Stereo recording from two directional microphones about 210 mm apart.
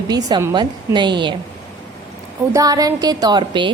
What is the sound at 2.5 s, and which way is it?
A woman's voice, 15° right (ahead or behind).